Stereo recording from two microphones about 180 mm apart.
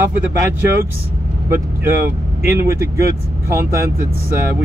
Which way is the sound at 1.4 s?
15° right (ahead or behind).